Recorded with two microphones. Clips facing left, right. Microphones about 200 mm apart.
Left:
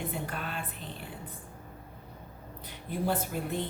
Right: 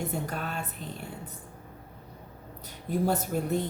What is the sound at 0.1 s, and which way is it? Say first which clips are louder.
Speech: right 3 dB; 45° right (ahead or behind).